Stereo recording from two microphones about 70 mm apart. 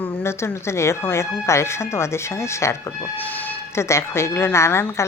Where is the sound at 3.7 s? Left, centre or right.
Left.